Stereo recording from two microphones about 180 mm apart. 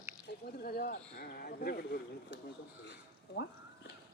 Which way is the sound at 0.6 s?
55° left (ahead or behind).